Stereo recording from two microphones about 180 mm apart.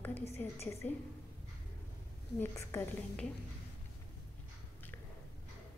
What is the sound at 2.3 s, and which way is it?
Speech, 15° left (ahead or behind).